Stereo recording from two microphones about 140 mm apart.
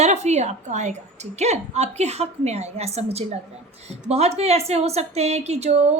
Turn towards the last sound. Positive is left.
turn(degrees=-50)  # may be behind; listen again after turning